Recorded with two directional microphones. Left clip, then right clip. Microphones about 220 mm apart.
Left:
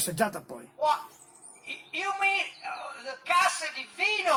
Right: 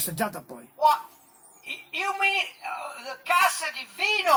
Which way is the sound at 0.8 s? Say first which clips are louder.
Right 6 dB; 40° right (ahead or behind).